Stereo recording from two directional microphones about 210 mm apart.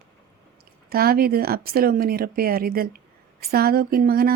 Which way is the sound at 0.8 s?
45° right (ahead or behind).